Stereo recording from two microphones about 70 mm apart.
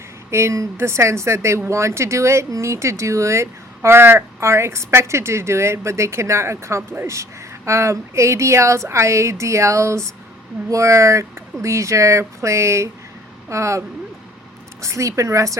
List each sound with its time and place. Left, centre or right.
0.3 s speech: right
3.8 s speech: right